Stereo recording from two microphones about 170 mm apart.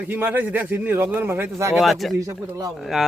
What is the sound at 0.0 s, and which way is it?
Speech, 10° right (ahead or behind).